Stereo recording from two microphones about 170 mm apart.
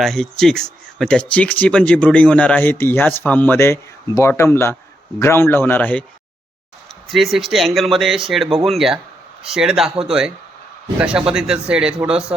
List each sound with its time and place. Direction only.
0.0 s speech: centre (ahead or behind)
7.1 s speech: centre (ahead or behind)